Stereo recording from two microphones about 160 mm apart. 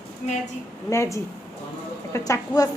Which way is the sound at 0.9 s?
20° left (ahead or behind).